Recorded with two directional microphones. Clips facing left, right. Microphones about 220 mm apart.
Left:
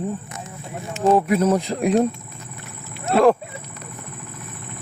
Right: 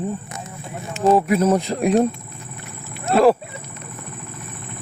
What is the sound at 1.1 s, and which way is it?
Speech, 5° right (ahead or behind).